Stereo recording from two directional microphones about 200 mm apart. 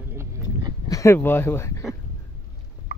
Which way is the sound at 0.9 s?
15° left (ahead or behind).